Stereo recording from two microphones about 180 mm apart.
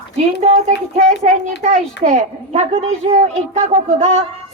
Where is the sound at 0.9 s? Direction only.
40° right (ahead or behind).